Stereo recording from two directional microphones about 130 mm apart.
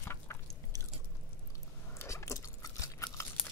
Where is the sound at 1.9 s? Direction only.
20° left (ahead or behind).